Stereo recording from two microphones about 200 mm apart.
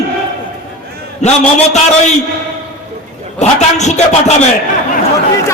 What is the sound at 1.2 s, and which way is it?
Speech, 35° left (ahead or behind).